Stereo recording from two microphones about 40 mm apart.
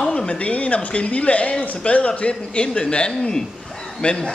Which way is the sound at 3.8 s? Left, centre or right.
Centre.